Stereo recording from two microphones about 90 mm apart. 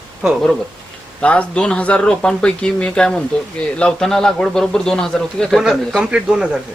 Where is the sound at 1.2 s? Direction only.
10° left (ahead or behind); by 6.6 s 10° right (ahead or behind).